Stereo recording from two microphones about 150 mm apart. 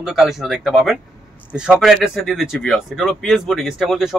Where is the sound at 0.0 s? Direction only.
Centre (ahead or behind).